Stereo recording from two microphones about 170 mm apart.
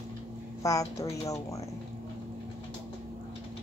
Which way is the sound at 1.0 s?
20° left (ahead or behind).